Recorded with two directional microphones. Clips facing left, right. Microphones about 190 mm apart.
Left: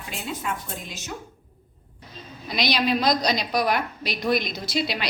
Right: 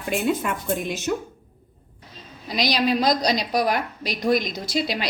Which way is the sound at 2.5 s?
40° right (ahead or behind).